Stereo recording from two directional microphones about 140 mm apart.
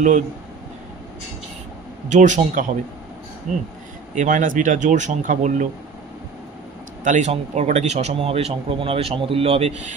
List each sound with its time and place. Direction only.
2.0 s speech: 60° right (ahead or behind)
7.1 s speech: 55° right (ahead or behind)